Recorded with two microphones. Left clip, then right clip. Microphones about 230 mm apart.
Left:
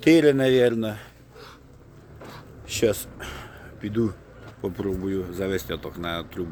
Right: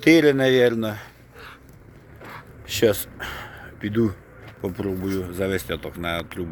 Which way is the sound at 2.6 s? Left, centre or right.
Centre.